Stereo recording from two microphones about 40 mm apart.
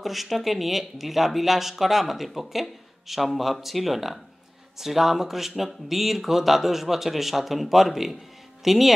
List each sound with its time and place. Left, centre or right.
0.0 s a man's voice: centre